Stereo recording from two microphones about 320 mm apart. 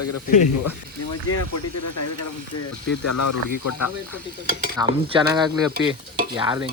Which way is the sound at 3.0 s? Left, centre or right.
Left.